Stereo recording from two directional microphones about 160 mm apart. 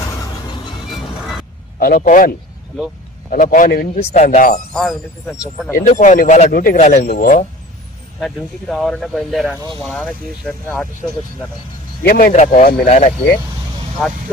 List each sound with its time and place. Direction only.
1.8 s a man's voice: 65° left (ahead or behind)
4.1 s speech: 50° left (ahead or behind)
4.7 s speech: 5° left (ahead or behind)
5.7 s a man's voice: 55° left (ahead or behind)
6.7 s speech: 50° left (ahead or behind)
8.2 s speech: centre (ahead or behind)
12.0 s speech: 70° left (ahead or behind)
12.3 s speech: 45° left (ahead or behind)